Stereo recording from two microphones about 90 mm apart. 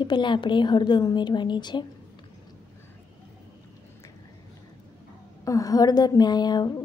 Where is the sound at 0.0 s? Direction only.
60° left (ahead or behind).